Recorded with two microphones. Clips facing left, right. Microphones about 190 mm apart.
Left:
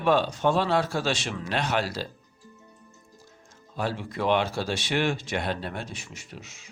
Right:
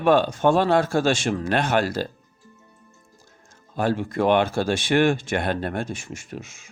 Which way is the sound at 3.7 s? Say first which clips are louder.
Right 7 dB; 50° right (ahead or behind).